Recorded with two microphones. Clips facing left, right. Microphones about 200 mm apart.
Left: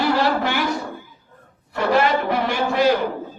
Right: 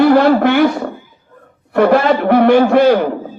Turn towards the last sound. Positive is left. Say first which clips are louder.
# right 9 dB
turn(degrees=-60)  # may be behind; listen again after turning